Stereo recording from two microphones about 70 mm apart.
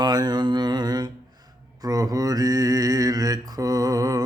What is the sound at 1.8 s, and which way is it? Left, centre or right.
Mantra, right.